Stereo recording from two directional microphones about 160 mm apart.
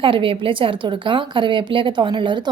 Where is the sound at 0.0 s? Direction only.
35° right (ahead or behind).